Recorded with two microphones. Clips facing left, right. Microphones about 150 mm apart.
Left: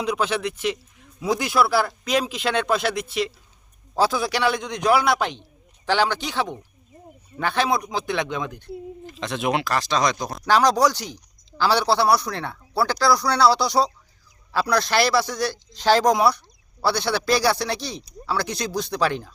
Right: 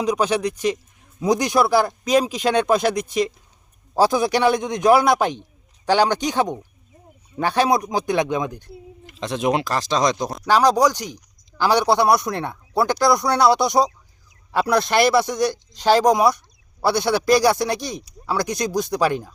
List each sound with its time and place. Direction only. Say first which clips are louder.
0.1 s a man's voice: right 4 dB; 40° right (ahead or behind)
3.9 s speech: right 4 dB; 15° right (ahead or behind)
4.7 s a man's voice: right 4 dB; 45° right (ahead or behind)
5.4 s a sound: right 4 dB; 15° right (ahead or behind)
6.1 s a man's voice: right 5 dB; 45° right (ahead or behind)
8.1 s speech: right 6 dB; 15° right (ahead or behind)
9.2 s speech: right 3 dB; 35° right (ahead or behind)
10.4 s speech: right 2 dB; 10° right (ahead or behind)